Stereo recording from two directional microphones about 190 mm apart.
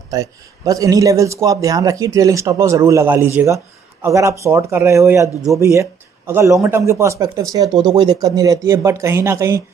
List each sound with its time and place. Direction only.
0.1 s a man's voice: 20° right (ahead or behind)